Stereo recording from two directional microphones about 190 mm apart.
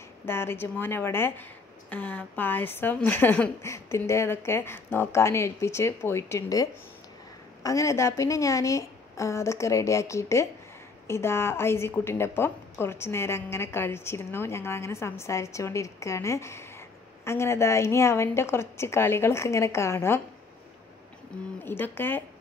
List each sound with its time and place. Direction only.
0.2 s a woman's voice: 10° left (ahead or behind)
21.3 s a woman's voice: 5° left (ahead or behind)